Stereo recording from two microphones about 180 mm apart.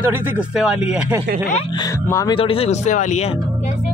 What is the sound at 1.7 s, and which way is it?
Speech, 20° left (ahead or behind).